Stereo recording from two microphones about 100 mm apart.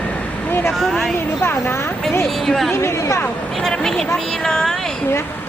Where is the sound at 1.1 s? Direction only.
25° left (ahead or behind).